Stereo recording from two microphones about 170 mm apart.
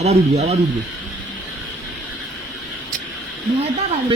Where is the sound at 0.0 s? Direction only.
40° right (ahead or behind).